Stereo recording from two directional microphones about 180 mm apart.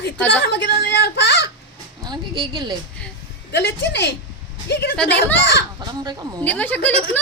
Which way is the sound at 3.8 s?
70° left (ahead or behind).